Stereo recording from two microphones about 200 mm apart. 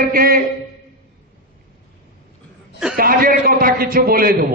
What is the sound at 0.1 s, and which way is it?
Speech, 45° right (ahead or behind).